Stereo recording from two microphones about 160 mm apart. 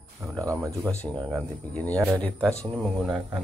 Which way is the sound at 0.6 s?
20° right (ahead or behind).